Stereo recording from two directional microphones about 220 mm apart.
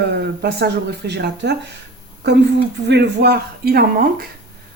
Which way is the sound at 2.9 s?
50° right (ahead or behind).